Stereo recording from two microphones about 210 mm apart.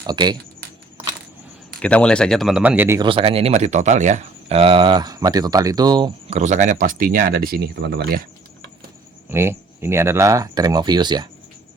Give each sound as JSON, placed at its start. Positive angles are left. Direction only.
{"t": 0.0, "sound": "speech", "side_deg": -20}
{"t": 1.8, "sound": "speech", "side_deg": 5}
{"t": 3.0, "sound": "speech", "side_deg": -25}
{"t": 9.3, "sound": "speech", "side_deg": -10}